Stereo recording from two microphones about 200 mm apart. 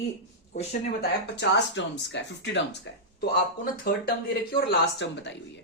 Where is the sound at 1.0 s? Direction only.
60° left (ahead or behind).